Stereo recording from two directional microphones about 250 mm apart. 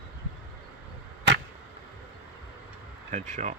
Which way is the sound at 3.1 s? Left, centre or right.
Right.